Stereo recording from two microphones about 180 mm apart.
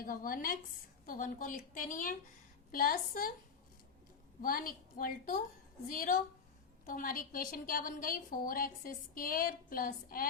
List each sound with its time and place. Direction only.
0.0 s a woman's voice: 50° left (ahead or behind)
4.4 s a woman's voice: 50° left (ahead or behind)